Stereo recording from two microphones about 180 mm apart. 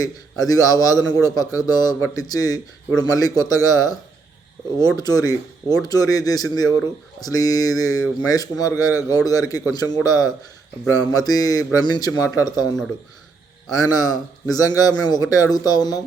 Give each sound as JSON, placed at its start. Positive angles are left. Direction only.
{"t": 0.0, "sound": "a man's voice", "side_deg": 20}
{"t": 4.9, "sound": "a man's voice", "side_deg": 20}
{"t": 13.7, "sound": "a man's voice", "side_deg": 20}